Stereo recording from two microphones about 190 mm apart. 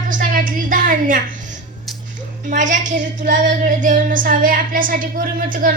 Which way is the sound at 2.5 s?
40° right (ahead or behind).